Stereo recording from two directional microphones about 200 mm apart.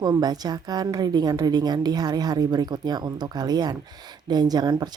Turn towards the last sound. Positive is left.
turn(degrees=-20)  # may be behind; listen again after turning